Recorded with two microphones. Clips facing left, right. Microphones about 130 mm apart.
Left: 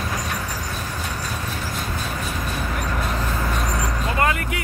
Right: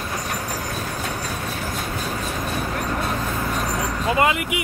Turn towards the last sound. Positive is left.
turn(degrees=-15)  # may be behind; listen again after turning